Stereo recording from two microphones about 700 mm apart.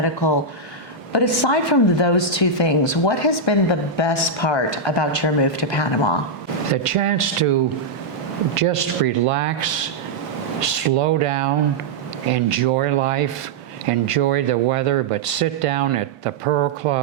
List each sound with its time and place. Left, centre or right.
0.0 s speech: left
1.5 s speech: left
6.8 s speech: right
8.5 s speech: right